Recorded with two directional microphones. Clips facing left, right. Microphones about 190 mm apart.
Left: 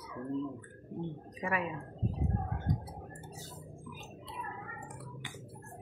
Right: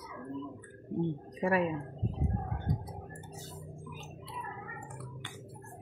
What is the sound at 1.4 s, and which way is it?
Speech, 35° right (ahead or behind).